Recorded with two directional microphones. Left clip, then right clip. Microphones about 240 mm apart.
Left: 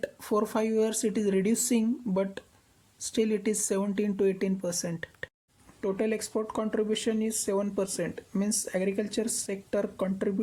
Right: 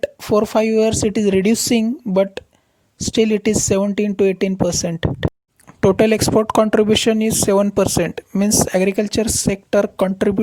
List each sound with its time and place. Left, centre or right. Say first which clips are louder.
0.0 s speech: right 12 dB; right